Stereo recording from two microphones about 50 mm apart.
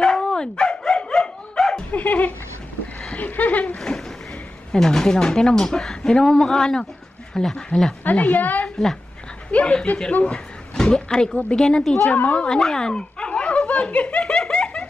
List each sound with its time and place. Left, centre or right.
0.0 s dog: centre
1.9 s a woman's voice: left
4.7 s a woman's voice: centre
8.0 s a woman's voice: left
8.6 s a sound: centre
9.5 s a woman's voice: left
12.1 s a woman's voice: left
12.4 s dog: centre